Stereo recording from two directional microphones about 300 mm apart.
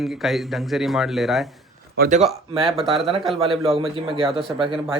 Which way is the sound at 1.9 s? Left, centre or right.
Right.